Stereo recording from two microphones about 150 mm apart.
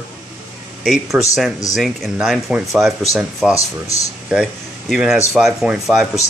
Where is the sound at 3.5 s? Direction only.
20° left (ahead or behind).